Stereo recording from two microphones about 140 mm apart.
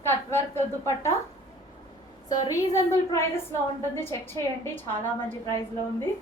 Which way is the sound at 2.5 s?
20° left (ahead or behind).